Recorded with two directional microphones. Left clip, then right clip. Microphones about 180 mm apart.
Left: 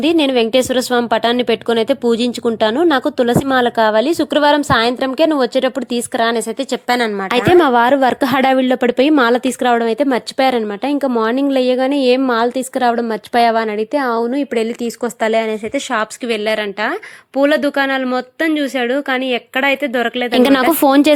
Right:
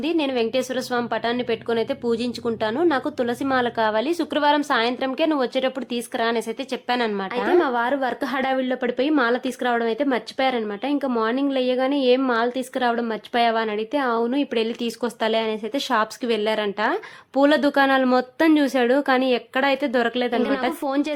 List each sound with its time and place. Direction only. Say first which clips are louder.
0.0 s a woman's voice: left 9 dB; 45° left (ahead or behind)
7.6 s a woman's voice: left 10 dB; 50° left (ahead or behind); by 15.8 s 25° left (ahead or behind)
15.9 s a woman's voice: left 2 dB; 15° left (ahead or behind)
20.8 s speech: left 13 dB; 55° left (ahead or behind)